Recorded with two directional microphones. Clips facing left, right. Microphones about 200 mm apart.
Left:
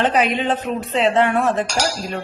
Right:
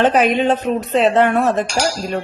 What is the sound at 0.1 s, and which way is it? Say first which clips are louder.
A woman's voice: right 4 dB; 45° right (ahead or behind).